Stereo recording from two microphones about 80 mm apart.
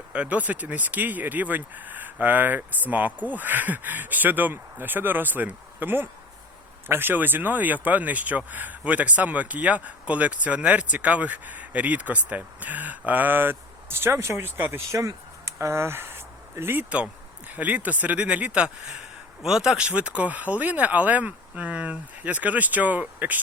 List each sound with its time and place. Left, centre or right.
0.1 s speech: centre
17.5 s speech: centre